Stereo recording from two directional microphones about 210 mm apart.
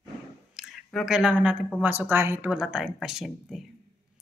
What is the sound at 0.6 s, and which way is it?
Speech, centre (ahead or behind).